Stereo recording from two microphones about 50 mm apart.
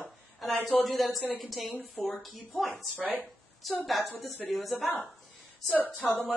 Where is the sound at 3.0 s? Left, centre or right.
Right.